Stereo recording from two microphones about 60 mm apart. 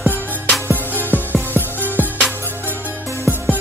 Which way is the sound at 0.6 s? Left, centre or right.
Right.